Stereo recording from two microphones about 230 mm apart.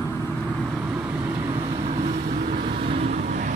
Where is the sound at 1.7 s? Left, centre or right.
Right.